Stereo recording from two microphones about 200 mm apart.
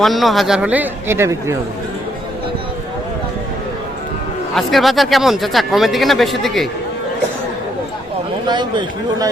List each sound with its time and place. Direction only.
0.0 s speech: centre (ahead or behind)
4.5 s speech: centre (ahead or behind)
8.4 s a man's voice: 20° right (ahead or behind)